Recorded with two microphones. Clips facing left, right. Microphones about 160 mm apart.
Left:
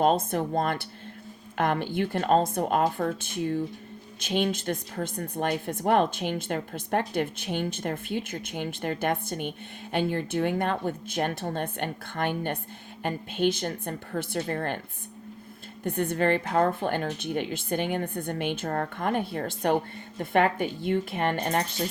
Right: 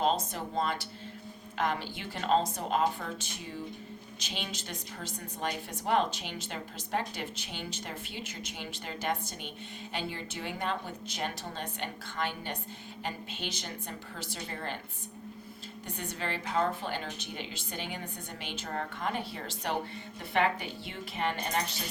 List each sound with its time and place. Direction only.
0.0 s speech: 55° left (ahead or behind)
15.8 s speech: 55° left (ahead or behind)